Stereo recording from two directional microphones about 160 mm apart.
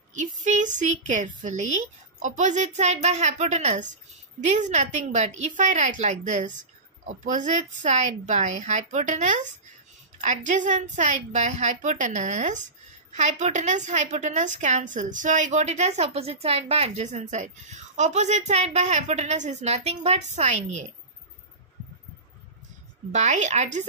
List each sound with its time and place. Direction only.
0.1 s a woman's voice: 50° right (ahead or behind)
23.1 s a woman's voice: 45° right (ahead or behind)